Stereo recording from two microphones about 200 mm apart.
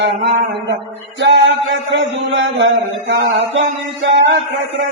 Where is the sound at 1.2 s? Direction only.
65° right (ahead or behind).